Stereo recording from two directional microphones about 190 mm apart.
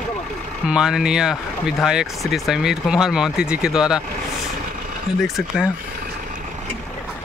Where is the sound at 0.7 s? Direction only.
5° right (ahead or behind).